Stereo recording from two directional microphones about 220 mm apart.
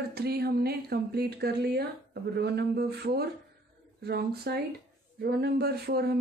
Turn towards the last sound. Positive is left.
turn(degrees=-45)  # may be behind; listen again after turning